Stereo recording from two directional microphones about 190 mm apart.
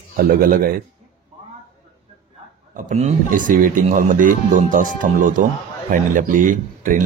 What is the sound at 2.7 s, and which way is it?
Speech, 45° right (ahead or behind).